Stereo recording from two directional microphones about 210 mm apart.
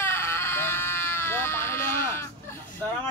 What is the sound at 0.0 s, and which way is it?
Sheep, 10° left (ahead or behind).